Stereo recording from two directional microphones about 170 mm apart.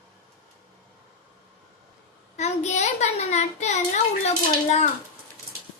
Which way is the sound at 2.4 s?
40° left (ahead or behind).